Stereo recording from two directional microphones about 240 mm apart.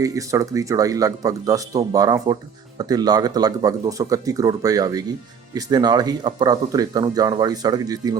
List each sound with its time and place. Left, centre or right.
0.0 s speech: centre